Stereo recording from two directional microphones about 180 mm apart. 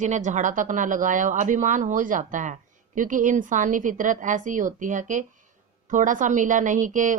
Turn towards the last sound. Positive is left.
turn(degrees=-45)  # may be behind; listen again after turning